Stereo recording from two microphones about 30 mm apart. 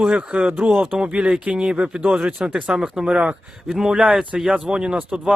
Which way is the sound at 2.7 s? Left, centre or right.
Centre.